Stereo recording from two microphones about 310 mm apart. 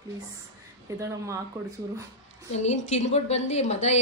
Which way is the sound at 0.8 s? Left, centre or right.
Centre.